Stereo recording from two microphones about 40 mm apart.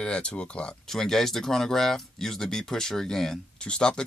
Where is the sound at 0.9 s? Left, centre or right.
Centre.